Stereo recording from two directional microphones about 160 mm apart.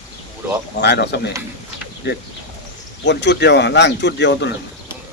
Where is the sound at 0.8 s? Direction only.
90° left.